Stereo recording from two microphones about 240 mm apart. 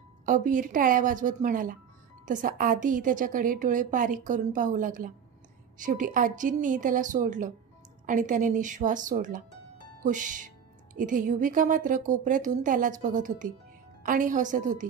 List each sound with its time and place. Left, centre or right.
0.2 s a woman's voice: right